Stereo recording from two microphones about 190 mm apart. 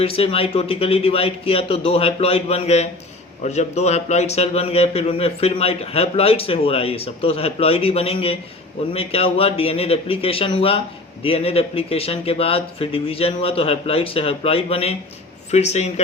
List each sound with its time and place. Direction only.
0.0 s a man's voice: 30° left (ahead or behind)